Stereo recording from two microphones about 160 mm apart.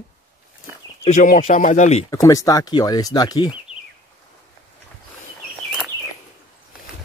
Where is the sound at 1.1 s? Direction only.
55° left (ahead or behind).